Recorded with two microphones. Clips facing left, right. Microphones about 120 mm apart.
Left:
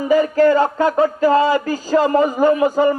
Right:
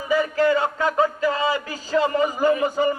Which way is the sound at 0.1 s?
45° left (ahead or behind).